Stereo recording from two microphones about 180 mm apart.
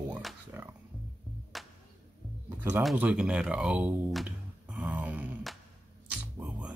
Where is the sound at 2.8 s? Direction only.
5° right (ahead or behind).